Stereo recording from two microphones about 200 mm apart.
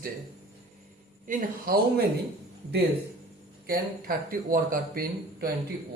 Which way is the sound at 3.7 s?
45° right (ahead or behind).